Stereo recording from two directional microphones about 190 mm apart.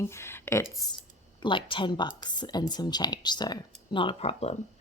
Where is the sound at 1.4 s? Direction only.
25° left (ahead or behind).